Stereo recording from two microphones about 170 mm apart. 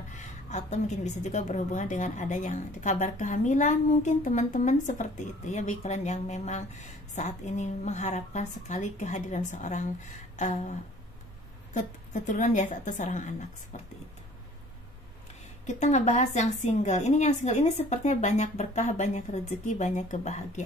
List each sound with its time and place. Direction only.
0.1 s a woman's voice: 45° left (ahead or behind)
10.3 s a sound: 45° left (ahead or behind)
11.7 s a woman's voice: 45° left (ahead or behind)
15.6 s a woman's voice: 45° left (ahead or behind)